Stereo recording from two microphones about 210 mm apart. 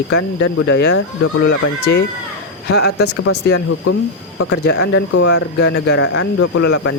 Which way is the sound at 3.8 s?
85° left.